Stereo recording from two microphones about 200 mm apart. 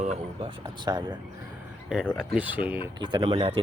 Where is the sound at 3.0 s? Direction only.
25° right (ahead or behind).